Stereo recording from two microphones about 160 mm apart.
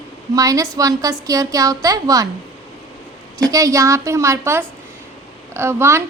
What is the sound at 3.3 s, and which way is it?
A woman's voice, 20° right (ahead or behind).